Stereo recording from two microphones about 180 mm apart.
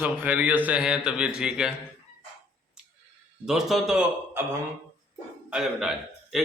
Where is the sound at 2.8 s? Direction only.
5° right (ahead or behind).